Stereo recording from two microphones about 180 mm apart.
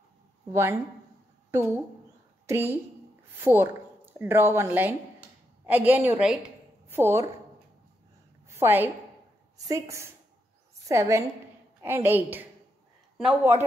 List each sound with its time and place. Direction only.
0.5 s a woman's voice: 15° right (ahead or behind)
8.5 s a woman's voice: 15° right (ahead or behind)